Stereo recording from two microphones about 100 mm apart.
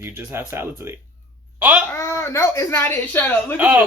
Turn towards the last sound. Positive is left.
turn(degrees=-15)  # may be behind; listen again after turning